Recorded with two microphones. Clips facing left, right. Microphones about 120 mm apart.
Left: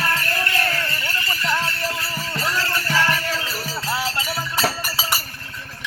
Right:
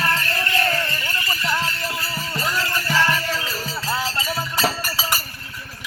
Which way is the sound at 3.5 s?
10° left (ahead or behind).